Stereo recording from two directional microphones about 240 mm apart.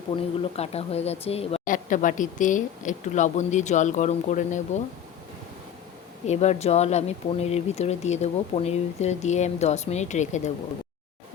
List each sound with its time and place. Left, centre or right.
0.1 s speech: left
6.2 s speech: left